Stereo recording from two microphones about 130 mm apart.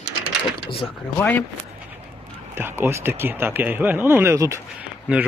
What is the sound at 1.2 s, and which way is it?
Speech, 15° left (ahead or behind).